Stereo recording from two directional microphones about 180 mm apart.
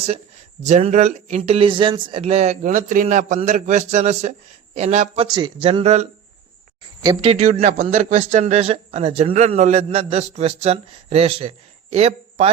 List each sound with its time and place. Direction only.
0.6 s a man's voice: 40° right (ahead or behind)
5.3 s a man's voice: 25° right (ahead or behind)
7.2 s a man's voice: 35° right (ahead or behind)